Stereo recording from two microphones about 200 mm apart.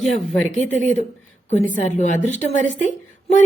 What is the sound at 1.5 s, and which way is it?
A woman's voice, 35° left (ahead or behind).